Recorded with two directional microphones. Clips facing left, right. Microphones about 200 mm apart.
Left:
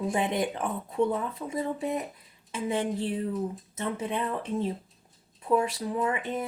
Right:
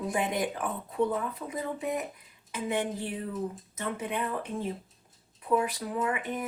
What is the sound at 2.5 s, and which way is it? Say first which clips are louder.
Speech: left 2 dB; 25° left (ahead or behind).